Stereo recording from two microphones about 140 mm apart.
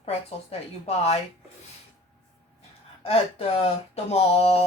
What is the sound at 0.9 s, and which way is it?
Speech, 45° left (ahead or behind).